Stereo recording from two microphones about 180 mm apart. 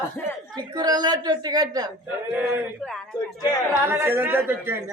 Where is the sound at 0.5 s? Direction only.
20° right (ahead or behind).